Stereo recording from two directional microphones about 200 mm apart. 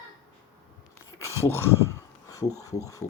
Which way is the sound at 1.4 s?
15° left (ahead or behind).